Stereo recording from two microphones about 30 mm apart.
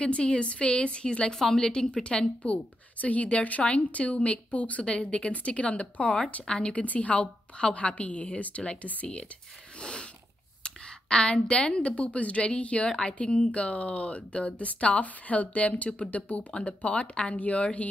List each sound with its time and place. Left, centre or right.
0.0 s a woman's voice: left
1.3 s a woman's voice: centre
2.0 s a woman's voice: left
4.8 s a woman's voice: left
5.6 s a woman's voice: left
9.8 s a sound: left
11.2 s a woman's voice: left